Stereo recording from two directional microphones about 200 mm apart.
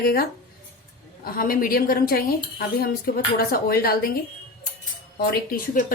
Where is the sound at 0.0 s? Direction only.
50° left (ahead or behind).